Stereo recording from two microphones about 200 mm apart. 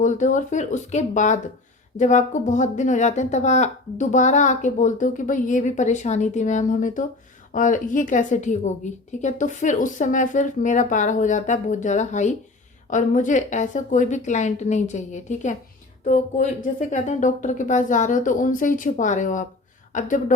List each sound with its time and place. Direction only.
0.0 s speech: 40° left (ahead or behind)